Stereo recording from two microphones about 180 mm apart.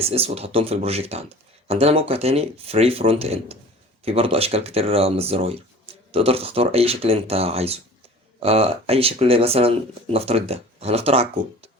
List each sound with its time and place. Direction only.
0.0 s speech: 35° right (ahead or behind)